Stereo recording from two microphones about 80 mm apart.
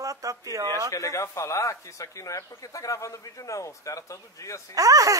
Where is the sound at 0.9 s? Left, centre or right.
Left.